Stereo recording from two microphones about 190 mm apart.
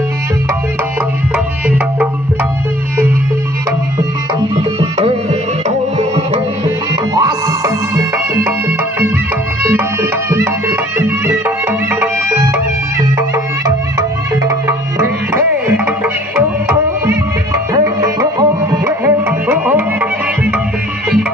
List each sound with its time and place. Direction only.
4.6 s tabla: 30° right (ahead or behind)
5.9 s music: 35° right (ahead or behind)
7.2 s music: 15° right (ahead or behind)
14.7 s music: 15° right (ahead or behind)
17.8 s tabla: 15° right (ahead or behind)